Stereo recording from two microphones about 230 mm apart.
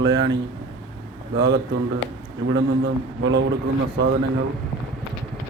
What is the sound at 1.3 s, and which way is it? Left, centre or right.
Speech, right.